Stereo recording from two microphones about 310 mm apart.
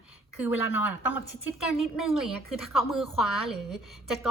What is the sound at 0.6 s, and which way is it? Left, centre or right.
Speech, left.